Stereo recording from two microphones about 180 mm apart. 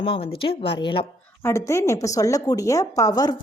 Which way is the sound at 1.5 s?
15° left (ahead or behind).